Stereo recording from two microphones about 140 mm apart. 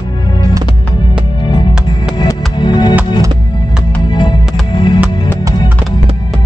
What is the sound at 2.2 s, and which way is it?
Music, 30° left (ahead or behind).